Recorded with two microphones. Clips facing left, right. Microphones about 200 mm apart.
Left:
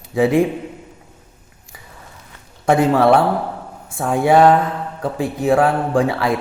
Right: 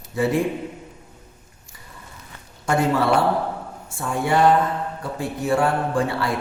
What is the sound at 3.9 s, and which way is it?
Speech, 90° left.